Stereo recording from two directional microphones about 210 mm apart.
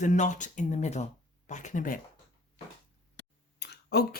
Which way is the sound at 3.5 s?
50° left (ahead or behind).